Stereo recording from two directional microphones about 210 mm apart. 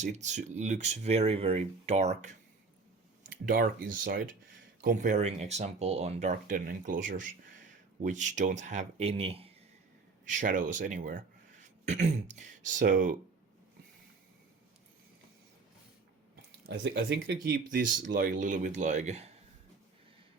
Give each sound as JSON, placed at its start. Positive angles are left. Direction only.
{"t": 0.0, "sound": "speech", "side_deg": -35}
{"t": 3.5, "sound": "speech", "side_deg": -45}
{"t": 10.2, "sound": "speech", "side_deg": -40}
{"t": 16.6, "sound": "speech", "side_deg": -50}